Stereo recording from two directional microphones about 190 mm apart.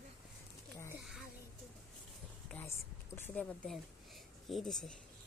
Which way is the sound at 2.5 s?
10° left (ahead or behind).